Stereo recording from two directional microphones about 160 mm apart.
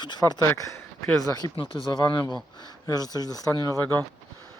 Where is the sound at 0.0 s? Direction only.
30° left (ahead or behind).